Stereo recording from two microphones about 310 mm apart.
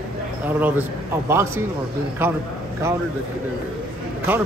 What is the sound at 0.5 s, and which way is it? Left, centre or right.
Speech, centre.